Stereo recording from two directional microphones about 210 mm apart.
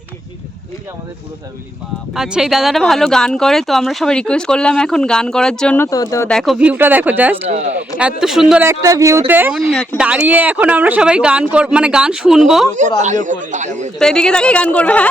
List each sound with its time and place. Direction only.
2.1 s speech: centre (ahead or behind); by 6.3 s 15° left (ahead or behind)
6.3 s speech: centre (ahead or behind)
7.4 s a man's voice: 30° right (ahead or behind)
7.9 s speech: 5° right (ahead or behind)
10.0 s speech: 5° right (ahead or behind)
13.0 s a man's voice: 35° right (ahead or behind)
14.0 s speech: 5° left (ahead or behind)